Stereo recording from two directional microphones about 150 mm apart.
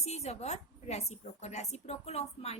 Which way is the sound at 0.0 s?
45° left (ahead or behind).